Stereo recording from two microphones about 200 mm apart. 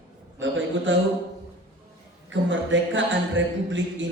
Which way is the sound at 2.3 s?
70° right (ahead or behind).